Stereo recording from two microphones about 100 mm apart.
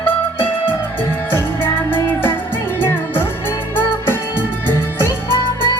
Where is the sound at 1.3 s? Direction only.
20° left (ahead or behind).